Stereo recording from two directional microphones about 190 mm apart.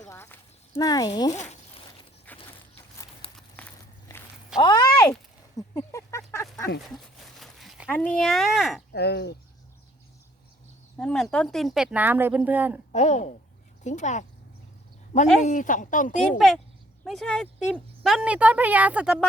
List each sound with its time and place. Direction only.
0.1 s a sound: 15° left (ahead or behind)
1.3 s zipper: 35° left (ahead or behind)
2.3 s a sound: 10° left (ahead or behind)
4.1 s walk: 20° left (ahead or behind)
4.5 s a sound: 20° left (ahead or behind)
6.9 s a sound: centre (ahead or behind)
7.9 s speech: 5° left (ahead or behind)
8.9 s speech: 60° left (ahead or behind)
10.9 s speech: 5° left (ahead or behind)
12.9 s speech: 35° left (ahead or behind)
15.4 s speech: 40° left (ahead or behind)
17.0 s speech: centre (ahead or behind)